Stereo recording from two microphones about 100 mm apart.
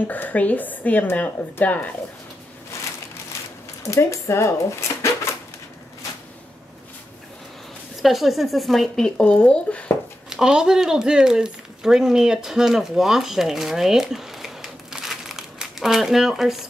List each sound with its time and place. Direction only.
0.0 s speech: 20° left (ahead or behind)
3.8 s speech: 30° left (ahead or behind)
8.0 s speech: centre (ahead or behind)
10.3 s speech: 5° right (ahead or behind)